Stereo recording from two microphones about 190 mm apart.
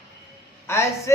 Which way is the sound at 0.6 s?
15° left (ahead or behind).